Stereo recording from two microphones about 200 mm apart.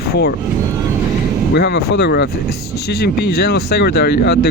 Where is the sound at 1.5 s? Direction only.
55° left (ahead or behind).